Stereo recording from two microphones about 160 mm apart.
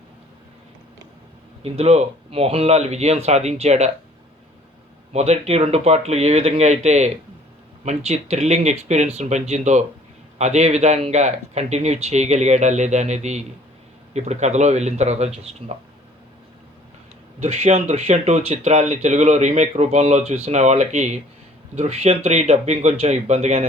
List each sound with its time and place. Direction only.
1.6 s speech: 40° right (ahead or behind)
5.1 s speech: 45° right (ahead or behind)
17.4 s speech: 45° right (ahead or behind)